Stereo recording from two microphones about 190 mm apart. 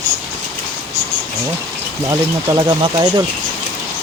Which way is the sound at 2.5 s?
25° right (ahead or behind).